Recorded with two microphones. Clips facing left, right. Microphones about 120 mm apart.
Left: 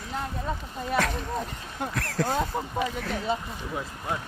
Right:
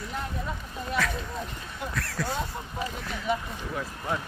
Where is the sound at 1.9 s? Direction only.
45° left (ahead or behind).